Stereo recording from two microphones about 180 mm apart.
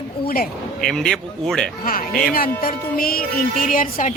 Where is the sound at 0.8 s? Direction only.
5° left (ahead or behind).